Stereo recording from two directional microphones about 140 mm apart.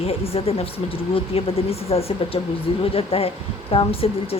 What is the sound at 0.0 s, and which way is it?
Speech, 45° left (ahead or behind).